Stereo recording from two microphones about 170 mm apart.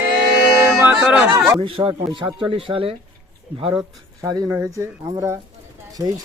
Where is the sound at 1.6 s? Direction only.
30° right (ahead or behind).